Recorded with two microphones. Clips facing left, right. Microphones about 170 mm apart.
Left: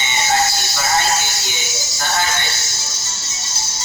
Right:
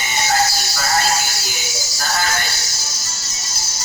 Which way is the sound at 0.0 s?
25° left (ahead or behind).